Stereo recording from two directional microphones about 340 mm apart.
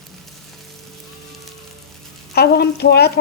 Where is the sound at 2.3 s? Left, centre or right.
Left.